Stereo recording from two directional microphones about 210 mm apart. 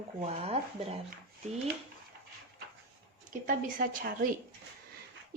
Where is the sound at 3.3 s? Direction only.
40° right (ahead or behind).